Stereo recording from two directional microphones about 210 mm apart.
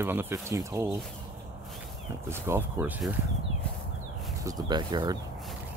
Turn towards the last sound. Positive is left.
turn(degrees=-20)  # may be behind; listen again after turning